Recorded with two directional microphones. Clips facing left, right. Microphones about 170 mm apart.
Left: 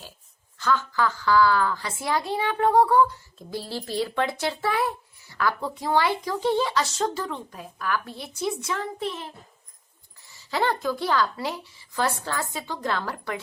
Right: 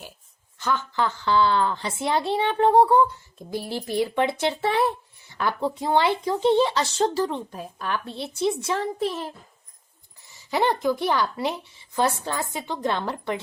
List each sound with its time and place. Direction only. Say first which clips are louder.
0.6 s a woman's voice: left 1 dB; 20° right (ahead or behind); by 9.3 s 35° right (ahead or behind)
10.2 s a woman's voice: right 2 dB; 20° right (ahead or behind)